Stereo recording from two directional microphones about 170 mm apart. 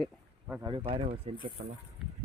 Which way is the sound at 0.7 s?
30° right (ahead or behind).